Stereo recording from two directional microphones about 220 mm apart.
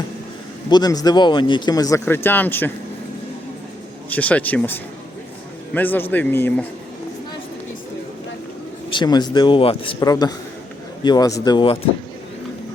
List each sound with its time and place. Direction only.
0.7 s speech: 15° left (ahead or behind)
4.1 s speech: 5° left (ahead or behind)
8.9 s a man's voice: 20° left (ahead or behind)